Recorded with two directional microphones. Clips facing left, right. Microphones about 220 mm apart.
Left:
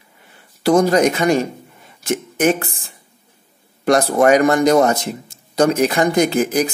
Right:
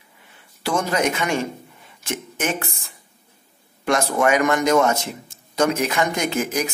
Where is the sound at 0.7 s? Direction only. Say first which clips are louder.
Left 8 dB; 40° left (ahead or behind).